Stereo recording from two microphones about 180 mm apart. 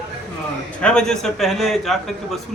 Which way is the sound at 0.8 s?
5° left (ahead or behind).